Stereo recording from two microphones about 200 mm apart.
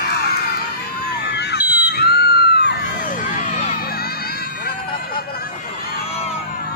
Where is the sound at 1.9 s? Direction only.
50° left (ahead or behind).